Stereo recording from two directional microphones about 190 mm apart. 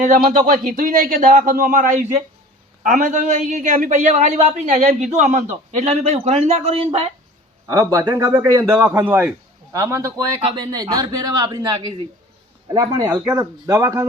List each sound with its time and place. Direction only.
0.0 s a man's voice: 40° right (ahead or behind)
7.7 s speech: 15° right (ahead or behind)